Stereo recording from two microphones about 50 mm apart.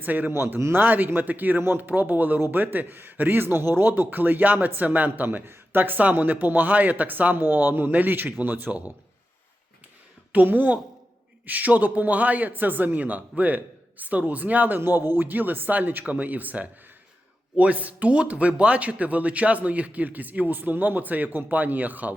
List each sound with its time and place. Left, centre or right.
0.0 s speech: right
0.3 s speech: right
10.3 s speech: right
14.8 s speech: right